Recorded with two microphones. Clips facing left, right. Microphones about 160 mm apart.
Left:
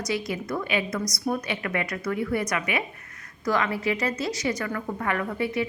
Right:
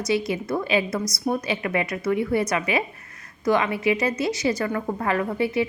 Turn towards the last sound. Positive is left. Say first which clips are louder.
# right 4 dB
turn(degrees=-30)  # may be behind; listen again after turning